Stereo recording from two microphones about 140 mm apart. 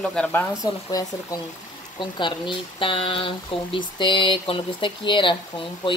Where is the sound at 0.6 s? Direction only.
25° left (ahead or behind).